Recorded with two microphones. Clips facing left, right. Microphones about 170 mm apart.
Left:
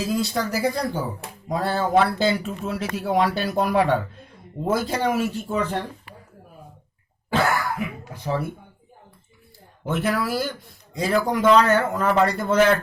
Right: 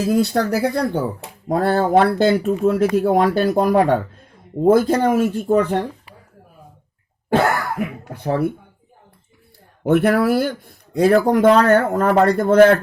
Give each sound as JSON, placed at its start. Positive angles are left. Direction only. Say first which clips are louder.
{"t": 0.0, "sound": "speech", "louder": "right 7 dB", "side_deg": -60}
{"t": 7.3, "sound": "throat clearing", "louder": "right 4 dB", "side_deg": -55}
{"t": 9.8, "sound": "speech", "louder": "right 9 dB", "side_deg": -60}